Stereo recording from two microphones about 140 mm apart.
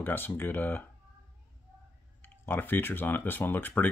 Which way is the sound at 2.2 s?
15° left (ahead or behind).